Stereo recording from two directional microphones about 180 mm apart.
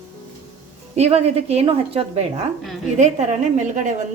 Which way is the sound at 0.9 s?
35° right (ahead or behind).